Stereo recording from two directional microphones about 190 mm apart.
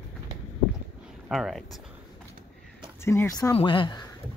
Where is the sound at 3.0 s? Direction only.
15° left (ahead or behind).